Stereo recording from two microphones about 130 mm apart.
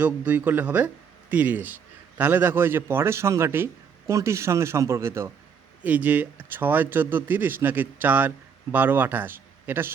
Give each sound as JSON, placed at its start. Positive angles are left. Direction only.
{"t": 0.0, "sound": "a man's voice", "side_deg": -15}